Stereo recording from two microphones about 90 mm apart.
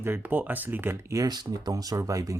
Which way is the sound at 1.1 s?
45° right (ahead or behind).